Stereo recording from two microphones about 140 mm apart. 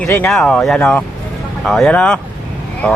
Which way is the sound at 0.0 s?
5° left (ahead or behind).